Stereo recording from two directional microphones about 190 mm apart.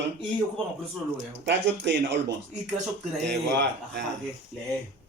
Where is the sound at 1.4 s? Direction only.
65° right (ahead or behind).